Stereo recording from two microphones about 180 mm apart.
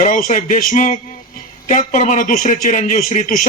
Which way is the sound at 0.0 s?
45° left (ahead or behind).